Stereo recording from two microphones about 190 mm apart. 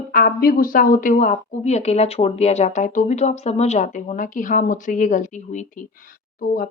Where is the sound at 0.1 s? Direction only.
45° left (ahead or behind).